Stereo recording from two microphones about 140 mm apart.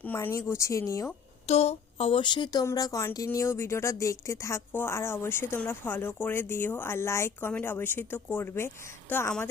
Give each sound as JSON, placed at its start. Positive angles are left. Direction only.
{"t": 0.0, "sound": "speech", "side_deg": 15}
{"t": 1.5, "sound": "speech", "side_deg": 50}